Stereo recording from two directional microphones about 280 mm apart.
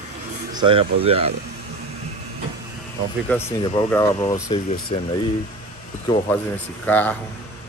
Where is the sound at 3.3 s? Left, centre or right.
Centre.